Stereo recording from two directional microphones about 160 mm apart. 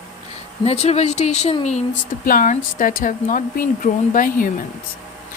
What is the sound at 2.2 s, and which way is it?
Speech, 55° left (ahead or behind).